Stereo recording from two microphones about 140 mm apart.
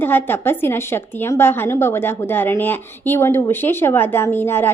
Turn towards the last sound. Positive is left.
turn(degrees=15)  # may be behind; listen again after turning